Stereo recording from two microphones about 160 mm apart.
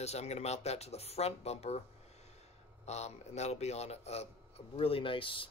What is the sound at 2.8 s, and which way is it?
A man's voice, 45° left (ahead or behind).